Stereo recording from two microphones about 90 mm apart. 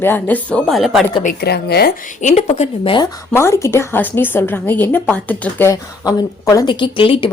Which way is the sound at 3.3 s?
30° left (ahead or behind).